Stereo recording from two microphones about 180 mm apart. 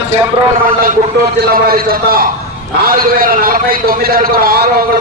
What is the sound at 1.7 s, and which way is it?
A man's voice, 55° right (ahead or behind).